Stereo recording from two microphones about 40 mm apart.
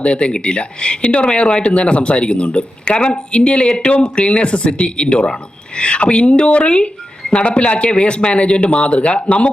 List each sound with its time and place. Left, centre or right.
0.0 s speech: left